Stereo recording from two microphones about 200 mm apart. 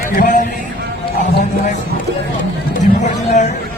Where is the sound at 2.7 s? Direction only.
40° left (ahead or behind).